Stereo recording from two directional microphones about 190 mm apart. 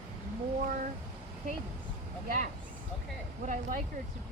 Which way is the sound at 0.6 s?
45° right (ahead or behind).